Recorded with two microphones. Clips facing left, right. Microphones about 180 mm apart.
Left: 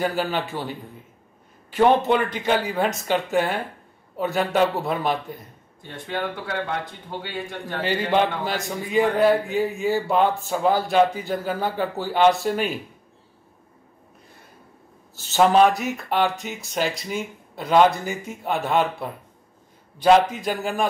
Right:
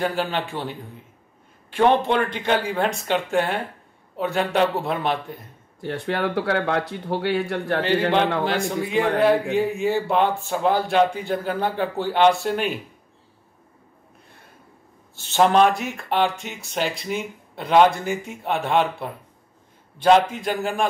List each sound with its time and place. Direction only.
0.0 s speech: 5° left (ahead or behind)
1.8 s speech: 5° left (ahead or behind)
5.8 s speech: 75° right (ahead or behind)
8.5 s speech: centre (ahead or behind)
15.1 s speech: centre (ahead or behind)